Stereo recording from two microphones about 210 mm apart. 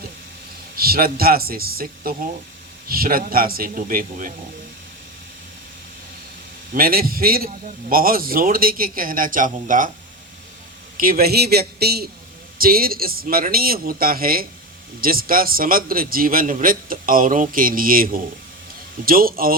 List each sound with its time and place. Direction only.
0.8 s a man's voice: 45° right (ahead or behind)
6.7 s a man's voice: 45° right (ahead or behind)
10.9 s a man's voice: 45° right (ahead or behind)